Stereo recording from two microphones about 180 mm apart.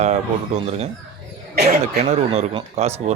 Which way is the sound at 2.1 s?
35° right (ahead or behind).